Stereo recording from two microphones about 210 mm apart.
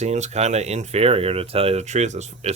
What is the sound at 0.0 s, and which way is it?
Speech, 30° right (ahead or behind).